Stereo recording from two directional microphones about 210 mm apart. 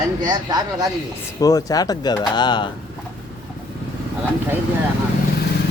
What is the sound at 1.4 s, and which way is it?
Speech, 15° left (ahead or behind).